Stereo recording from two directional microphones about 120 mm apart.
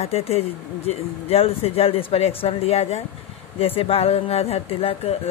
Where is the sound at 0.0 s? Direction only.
60° left (ahead or behind).